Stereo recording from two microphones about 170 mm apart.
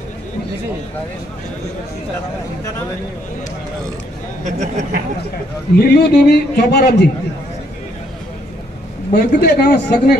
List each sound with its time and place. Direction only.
4.5 s speech: 45° right (ahead or behind)
5.8 s a man's voice: 70° left (ahead or behind)
9.1 s a man's voice: 70° left (ahead or behind)